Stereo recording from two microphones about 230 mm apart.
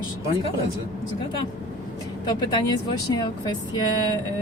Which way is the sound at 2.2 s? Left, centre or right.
Centre.